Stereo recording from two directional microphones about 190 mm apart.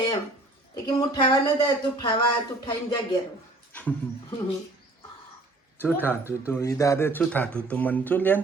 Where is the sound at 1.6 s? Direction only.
25° left (ahead or behind).